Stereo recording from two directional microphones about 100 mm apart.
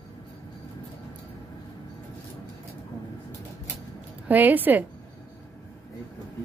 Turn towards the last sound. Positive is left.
turn(degrees=-20)  # may be behind; listen again after turning